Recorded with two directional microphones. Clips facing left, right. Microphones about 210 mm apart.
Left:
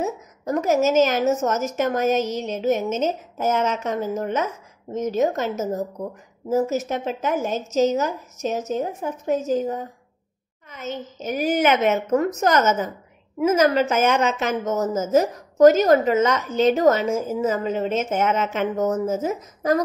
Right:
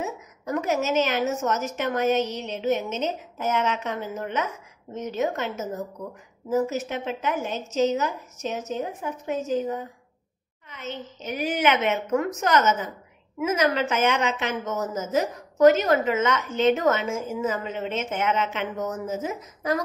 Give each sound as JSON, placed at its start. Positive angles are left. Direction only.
{"t": 0.0, "sound": "a woman's voice", "side_deg": 40}